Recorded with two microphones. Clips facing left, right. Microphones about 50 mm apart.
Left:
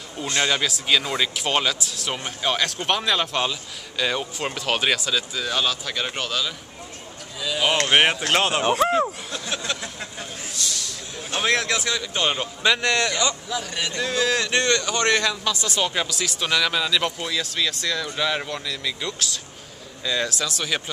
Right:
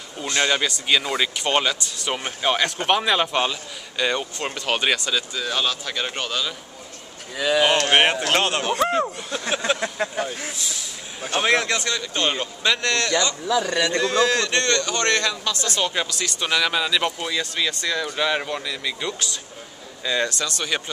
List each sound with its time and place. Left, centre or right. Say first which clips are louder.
0.2 s a man's voice: right 1 dB; centre
7.3 s speech: right 5 dB; right
7.9 s a man's voice: right 1 dB; centre
9.8 s speech: right 9 dB; right
10.5 s speech: left 1 dB; centre
11.3 s speech: right 2 dB; centre
13.9 s a man's voice: right 1 dB; centre